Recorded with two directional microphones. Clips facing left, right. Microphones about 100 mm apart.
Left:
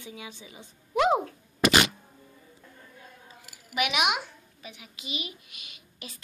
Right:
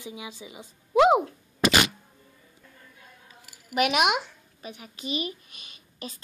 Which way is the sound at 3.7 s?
45° right (ahead or behind).